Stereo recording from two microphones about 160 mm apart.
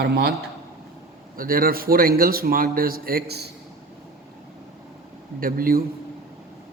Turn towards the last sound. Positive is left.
turn(degrees=-65)  # may be behind; listen again after turning